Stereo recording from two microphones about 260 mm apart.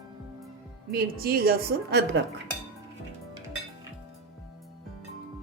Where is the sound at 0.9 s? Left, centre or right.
Right.